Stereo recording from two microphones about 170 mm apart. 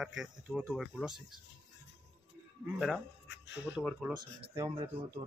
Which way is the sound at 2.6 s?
Centre (ahead or behind).